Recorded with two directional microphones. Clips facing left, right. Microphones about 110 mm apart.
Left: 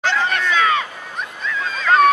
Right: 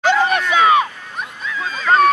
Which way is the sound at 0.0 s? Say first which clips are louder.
Right 4 dB; 15° right (ahead or behind).